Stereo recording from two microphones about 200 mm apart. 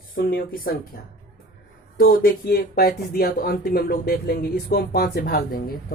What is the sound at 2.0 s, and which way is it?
Speech, 45° left (ahead or behind).